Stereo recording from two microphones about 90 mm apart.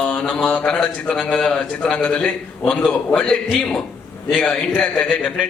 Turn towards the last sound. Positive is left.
turn(degrees=10)  # may be behind; listen again after turning